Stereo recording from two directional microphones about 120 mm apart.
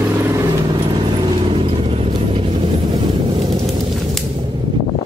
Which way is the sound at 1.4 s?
50° right (ahead or behind).